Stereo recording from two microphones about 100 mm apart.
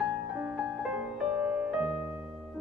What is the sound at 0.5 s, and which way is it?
Music, 10° right (ahead or behind).